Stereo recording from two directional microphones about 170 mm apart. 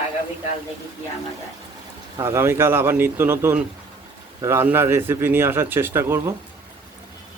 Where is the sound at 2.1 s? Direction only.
15° right (ahead or behind).